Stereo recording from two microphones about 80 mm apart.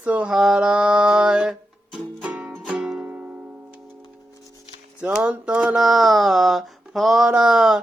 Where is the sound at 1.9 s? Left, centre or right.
Centre.